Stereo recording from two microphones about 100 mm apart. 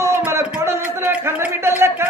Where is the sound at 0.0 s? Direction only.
25° right (ahead or behind).